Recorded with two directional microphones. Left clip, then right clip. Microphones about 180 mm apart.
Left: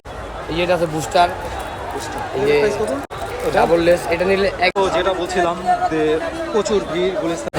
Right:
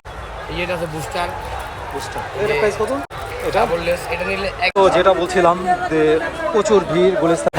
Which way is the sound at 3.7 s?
60° left (ahead or behind).